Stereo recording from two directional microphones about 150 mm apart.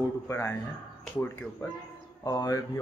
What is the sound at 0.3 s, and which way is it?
Speech, 15° left (ahead or behind).